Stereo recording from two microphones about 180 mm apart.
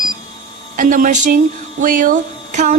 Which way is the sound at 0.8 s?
50° right (ahead or behind).